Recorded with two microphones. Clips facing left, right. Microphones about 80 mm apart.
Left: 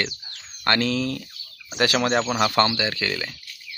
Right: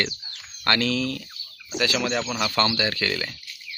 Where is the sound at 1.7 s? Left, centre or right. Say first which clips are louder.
Left 4 dB; left.